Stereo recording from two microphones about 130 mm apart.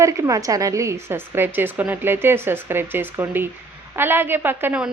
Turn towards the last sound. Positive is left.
turn(degrees=-15)  # may be behind; listen again after turning